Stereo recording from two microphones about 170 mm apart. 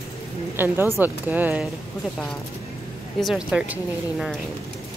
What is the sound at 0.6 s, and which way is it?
A woman's voice, 15° right (ahead or behind).